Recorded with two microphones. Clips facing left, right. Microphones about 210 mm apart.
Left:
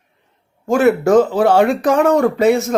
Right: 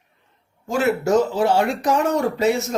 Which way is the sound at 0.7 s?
55° left (ahead or behind).